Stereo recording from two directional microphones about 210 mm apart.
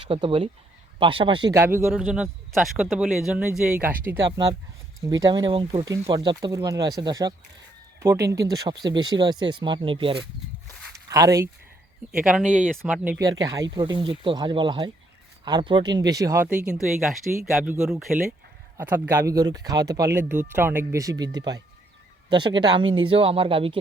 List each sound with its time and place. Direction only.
0.1 s speech: 25° right (ahead or behind)
5.2 s speech: 20° right (ahead or behind)
10.9 s a sound: 15° right (ahead or behind)
12.1 s speech: 5° right (ahead or behind)
13.1 s speech: 15° right (ahead or behind)
18.8 s speech: 10° right (ahead or behind); by 23.8 s 25° right (ahead or behind)